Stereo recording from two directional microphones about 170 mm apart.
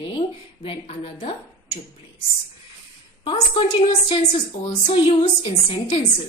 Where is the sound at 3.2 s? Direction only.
30° left (ahead or behind).